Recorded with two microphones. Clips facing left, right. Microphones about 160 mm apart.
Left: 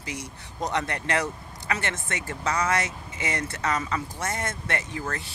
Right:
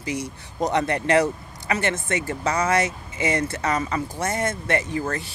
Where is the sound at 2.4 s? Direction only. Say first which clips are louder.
Right 2 dB; 20° right (ahead or behind).